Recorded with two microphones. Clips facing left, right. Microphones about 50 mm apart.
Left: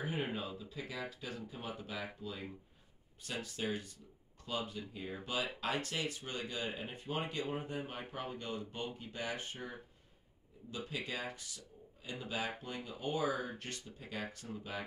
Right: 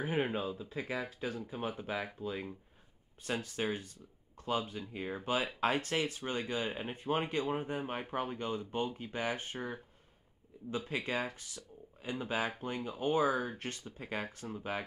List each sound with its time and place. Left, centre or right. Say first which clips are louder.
0.0 s speech: right 5 dB; right
10.9 s speech: right 5 dB; right
14.2 s speech: right 2 dB; right
14.5 s speech: right 9 dB; right